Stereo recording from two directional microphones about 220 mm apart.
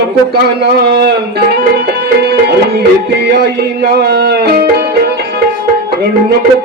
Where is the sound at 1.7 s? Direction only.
50° right (ahead or behind).